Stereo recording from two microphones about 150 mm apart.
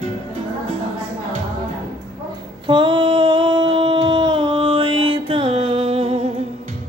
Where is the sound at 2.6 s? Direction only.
35° right (ahead or behind).